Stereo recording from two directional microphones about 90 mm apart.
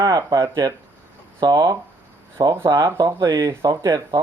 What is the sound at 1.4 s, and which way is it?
Speech, 50° right (ahead or behind).